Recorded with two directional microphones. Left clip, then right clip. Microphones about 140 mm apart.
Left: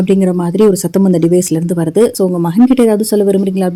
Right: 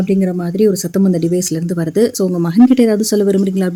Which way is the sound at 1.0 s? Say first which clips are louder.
Left 5 dB; 20° left (ahead or behind).